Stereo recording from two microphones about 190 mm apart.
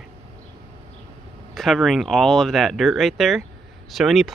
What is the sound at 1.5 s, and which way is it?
Speech, centre (ahead or behind).